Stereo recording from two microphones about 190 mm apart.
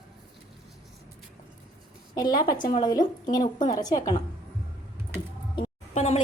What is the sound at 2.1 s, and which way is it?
Speech, 20° left (ahead or behind).